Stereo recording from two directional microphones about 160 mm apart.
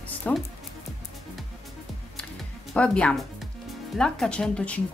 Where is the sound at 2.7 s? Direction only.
5° left (ahead or behind).